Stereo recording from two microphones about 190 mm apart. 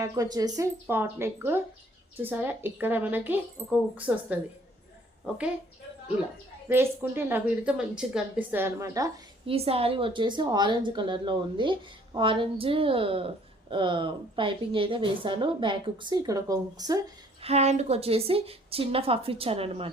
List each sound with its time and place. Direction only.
0.0 s a woman's voice: 20° right (ahead or behind)
6.7 s a woman's voice: 10° right (ahead or behind)
9.5 s a woman's voice: 30° right (ahead or behind)
17.4 s a woman's voice: 35° right (ahead or behind)